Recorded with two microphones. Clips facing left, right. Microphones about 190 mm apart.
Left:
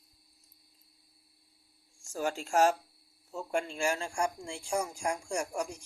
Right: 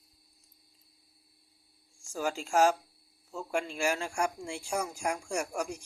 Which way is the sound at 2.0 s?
Centre (ahead or behind).